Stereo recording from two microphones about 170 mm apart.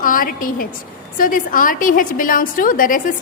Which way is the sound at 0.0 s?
55° left (ahead or behind).